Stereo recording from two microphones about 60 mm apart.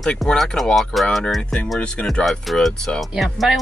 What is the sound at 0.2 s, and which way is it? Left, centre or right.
Speech, centre.